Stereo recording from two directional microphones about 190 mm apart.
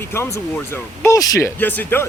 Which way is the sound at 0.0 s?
15° left (ahead or behind).